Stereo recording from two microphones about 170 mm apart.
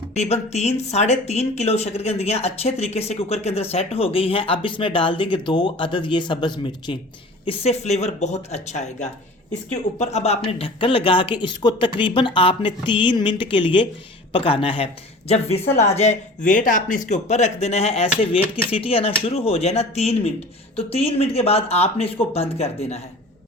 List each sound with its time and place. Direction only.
0.1 s speech: 40° left (ahead or behind)